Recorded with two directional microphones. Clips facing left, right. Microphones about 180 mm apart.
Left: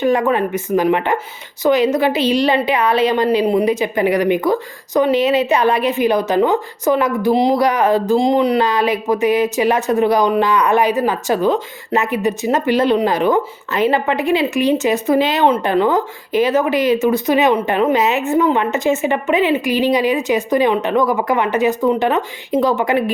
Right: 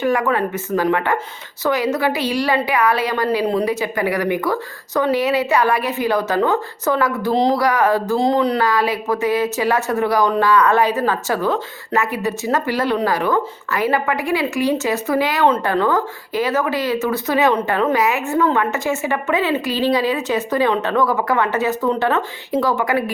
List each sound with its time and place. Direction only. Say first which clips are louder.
0.0 s a woman's voice: left 3 dB; 20° left (ahead or behind)